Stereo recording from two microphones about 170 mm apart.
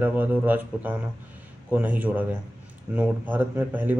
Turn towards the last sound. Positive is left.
turn(degrees=-10)  # may be behind; listen again after turning